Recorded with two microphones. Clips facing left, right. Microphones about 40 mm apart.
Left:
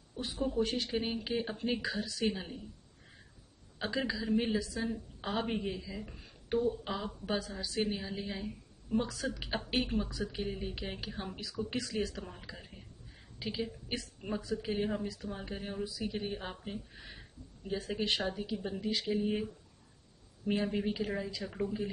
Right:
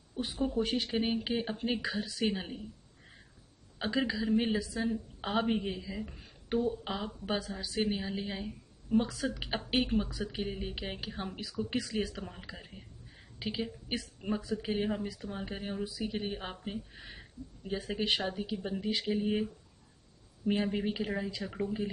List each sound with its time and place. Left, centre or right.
0.1 s a woman's voice: centre
3.8 s a woman's voice: centre
20.6 s speech: centre